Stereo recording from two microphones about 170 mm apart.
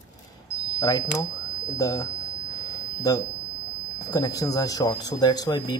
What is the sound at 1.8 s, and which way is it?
Speech, 20° left (ahead or behind).